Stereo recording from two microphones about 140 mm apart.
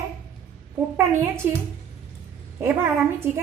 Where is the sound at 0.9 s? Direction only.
15° right (ahead or behind).